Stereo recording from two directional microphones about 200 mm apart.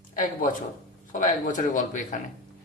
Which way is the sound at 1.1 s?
40° left (ahead or behind).